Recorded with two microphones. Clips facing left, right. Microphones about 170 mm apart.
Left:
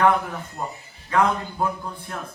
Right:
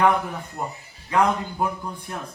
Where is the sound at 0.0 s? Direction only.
15° right (ahead or behind).